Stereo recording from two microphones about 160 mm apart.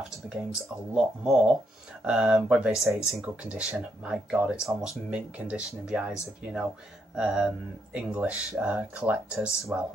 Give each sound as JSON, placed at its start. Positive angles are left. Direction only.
{"t": 0.9, "sound": "speech", "side_deg": -5}